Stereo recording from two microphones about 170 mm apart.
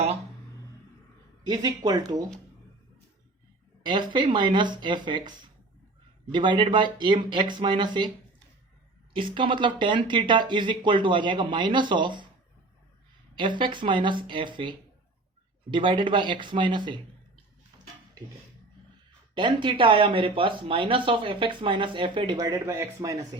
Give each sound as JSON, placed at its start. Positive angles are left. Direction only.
{"t": 1.5, "sound": "speech", "side_deg": -25}
{"t": 3.8, "sound": "speech", "side_deg": -25}
{"t": 6.3, "sound": "speech", "side_deg": -25}
{"t": 9.1, "sound": "speech", "side_deg": -30}
{"t": 13.3, "sound": "speech", "side_deg": -30}
{"t": 19.3, "sound": "speech", "side_deg": -25}